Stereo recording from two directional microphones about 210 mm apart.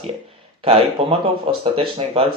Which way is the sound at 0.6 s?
25° right (ahead or behind).